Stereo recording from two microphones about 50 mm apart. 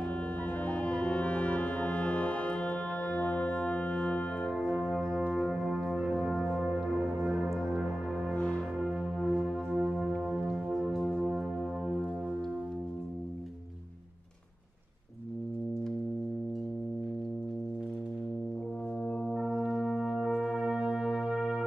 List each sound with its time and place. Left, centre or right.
0.7 s music: left
5.8 s music: centre
8.4 s music: left
9.2 s music: centre
19.3 s brass instrument: centre
20.0 s brass instrument: centre
21.4 s music: centre